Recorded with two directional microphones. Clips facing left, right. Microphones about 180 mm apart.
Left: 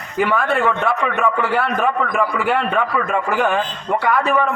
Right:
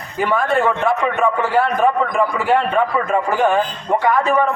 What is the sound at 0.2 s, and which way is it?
A man's voice, 35° right (ahead or behind).